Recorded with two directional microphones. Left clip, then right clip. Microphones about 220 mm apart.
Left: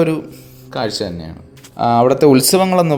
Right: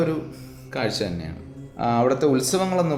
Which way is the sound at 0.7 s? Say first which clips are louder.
Left 5 dB; 20° left (ahead or behind).